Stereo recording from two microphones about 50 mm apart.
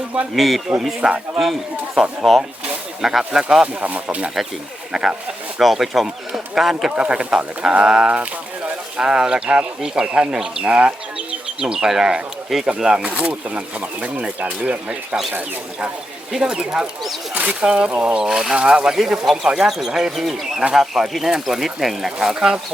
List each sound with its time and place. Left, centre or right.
0.3 s speech: centre
1.0 s speech: right
2.2 s speech: centre
3.8 s speech: right
4.9 s speech: centre
6.9 s speech: right
11.6 s speech: centre
12.8 s speech: centre
16.3 s speech: centre
17.3 s speech: right
18.3 s speech: centre